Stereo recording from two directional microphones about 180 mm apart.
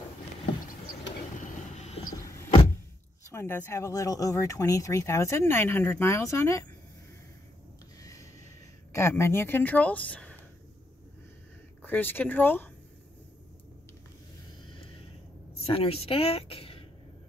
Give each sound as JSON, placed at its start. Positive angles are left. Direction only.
{"t": 1.4, "sound": "train", "side_deg": 40}
{"t": 3.3, "sound": "speech", "side_deg": 15}
{"t": 8.0, "sound": "a sound", "side_deg": 15}
{"t": 8.9, "sound": "speech", "side_deg": 15}
{"t": 11.8, "sound": "speech", "side_deg": 10}
{"t": 15.6, "sound": "speech", "side_deg": 30}